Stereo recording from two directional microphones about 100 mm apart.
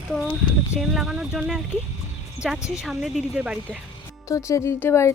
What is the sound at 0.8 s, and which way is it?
Speech, 5° right (ahead or behind).